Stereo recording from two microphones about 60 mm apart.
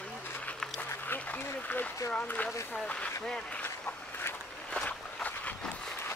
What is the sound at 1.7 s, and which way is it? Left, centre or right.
Speech, left.